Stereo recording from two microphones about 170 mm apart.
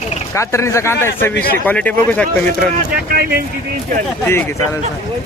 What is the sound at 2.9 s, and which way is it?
Speech, 65° right (ahead or behind).